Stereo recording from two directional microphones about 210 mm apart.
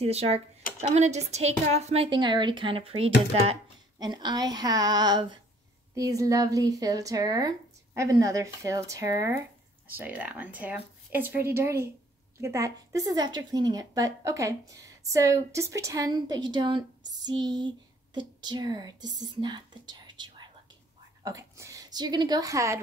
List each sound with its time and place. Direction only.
0.0 s a woman's voice: 30° right (ahead or behind); by 22.8 s 15° right (ahead or behind)